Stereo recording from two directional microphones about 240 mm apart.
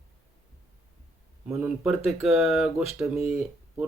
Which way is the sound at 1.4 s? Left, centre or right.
Centre.